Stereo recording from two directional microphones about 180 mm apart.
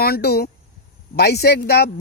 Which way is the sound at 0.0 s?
60° left (ahead or behind).